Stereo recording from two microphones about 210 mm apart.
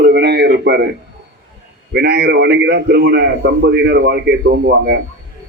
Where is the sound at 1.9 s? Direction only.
50° right (ahead or behind).